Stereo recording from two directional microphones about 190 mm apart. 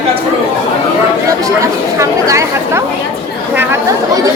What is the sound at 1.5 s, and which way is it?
Chatter, 15° right (ahead or behind).